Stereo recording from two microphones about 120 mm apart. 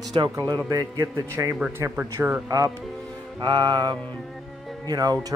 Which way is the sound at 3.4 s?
35° right (ahead or behind).